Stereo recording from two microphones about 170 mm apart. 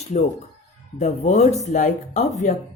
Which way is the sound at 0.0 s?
40° left (ahead or behind).